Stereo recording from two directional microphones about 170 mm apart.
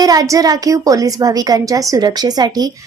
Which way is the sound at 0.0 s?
20° right (ahead or behind).